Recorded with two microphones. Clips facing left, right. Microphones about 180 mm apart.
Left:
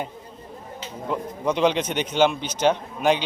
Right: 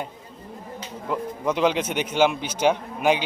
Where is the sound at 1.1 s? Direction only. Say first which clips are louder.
Even; 5° right (ahead or behind).